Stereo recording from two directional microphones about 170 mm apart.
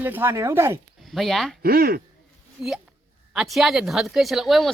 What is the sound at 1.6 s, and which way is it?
Speech, 60° right (ahead or behind).